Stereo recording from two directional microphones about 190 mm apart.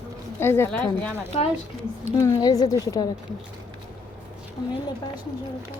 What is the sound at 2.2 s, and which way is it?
Speech, 15° left (ahead or behind).